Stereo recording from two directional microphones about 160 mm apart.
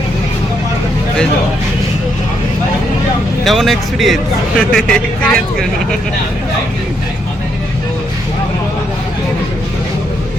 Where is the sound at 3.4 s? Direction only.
Centre (ahead or behind).